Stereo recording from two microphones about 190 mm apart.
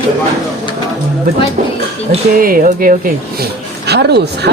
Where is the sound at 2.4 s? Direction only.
50° right (ahead or behind).